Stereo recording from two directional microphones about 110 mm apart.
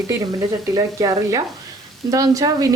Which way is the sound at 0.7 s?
35° right (ahead or behind).